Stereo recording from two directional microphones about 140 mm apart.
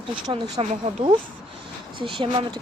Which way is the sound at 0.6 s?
40° right (ahead or behind).